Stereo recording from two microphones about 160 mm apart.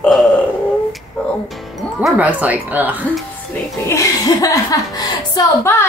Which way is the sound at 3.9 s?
20° left (ahead or behind).